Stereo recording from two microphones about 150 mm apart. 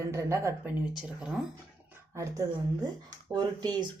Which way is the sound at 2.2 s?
20° right (ahead or behind).